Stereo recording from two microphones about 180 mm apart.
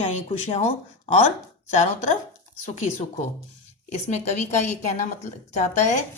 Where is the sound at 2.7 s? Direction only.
40° left (ahead or behind).